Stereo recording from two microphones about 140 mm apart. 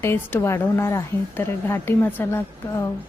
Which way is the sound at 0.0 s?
15° left (ahead or behind).